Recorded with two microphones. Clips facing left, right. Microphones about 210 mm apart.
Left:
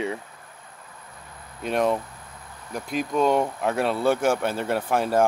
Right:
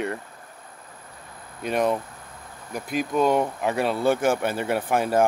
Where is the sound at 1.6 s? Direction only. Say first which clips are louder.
Even; centre (ahead or behind).